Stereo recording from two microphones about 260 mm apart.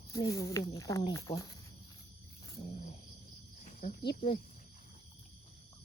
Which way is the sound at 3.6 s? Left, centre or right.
Left.